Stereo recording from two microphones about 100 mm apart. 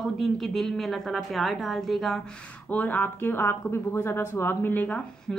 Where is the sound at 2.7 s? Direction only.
15° left (ahead or behind).